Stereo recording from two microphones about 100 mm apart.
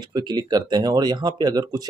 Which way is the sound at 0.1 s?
45° right (ahead or behind).